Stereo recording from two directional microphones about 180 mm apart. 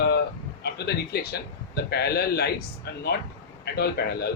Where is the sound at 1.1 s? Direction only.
65° left (ahead or behind).